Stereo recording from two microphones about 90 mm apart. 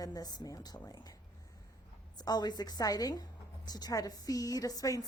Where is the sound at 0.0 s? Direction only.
45° left (ahead or behind).